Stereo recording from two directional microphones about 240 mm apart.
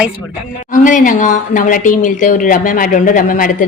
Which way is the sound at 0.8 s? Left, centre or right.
Left.